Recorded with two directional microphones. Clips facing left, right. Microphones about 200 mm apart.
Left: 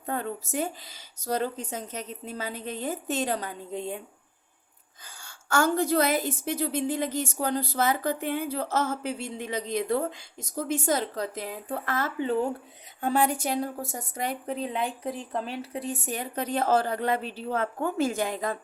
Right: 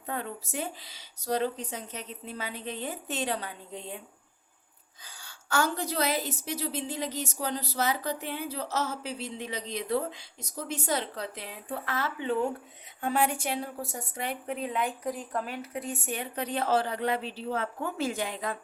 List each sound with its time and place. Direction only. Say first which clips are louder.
0.0 s a woman's voice: left 4 dB; 45° left (ahead or behind)
5.0 s a woman's voice: left 4 dB; 45° left (ahead or behind)